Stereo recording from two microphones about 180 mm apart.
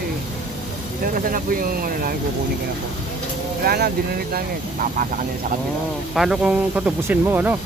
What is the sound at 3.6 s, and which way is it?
Speech, 60° right (ahead or behind).